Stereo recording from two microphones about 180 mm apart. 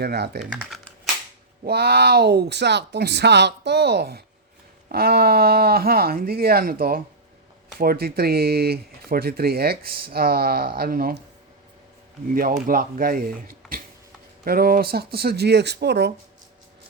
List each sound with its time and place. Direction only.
0.0 s speech: 60° right (ahead or behind)
0.5 s speech: 5° right (ahead or behind)
1.6 s speech: 65° right (ahead or behind)
12.3 s speech: 50° right (ahead or behind); by 16.1 s 65° right (ahead or behind)